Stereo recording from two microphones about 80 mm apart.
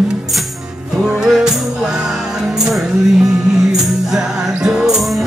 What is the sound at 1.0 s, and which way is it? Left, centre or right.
Music, centre.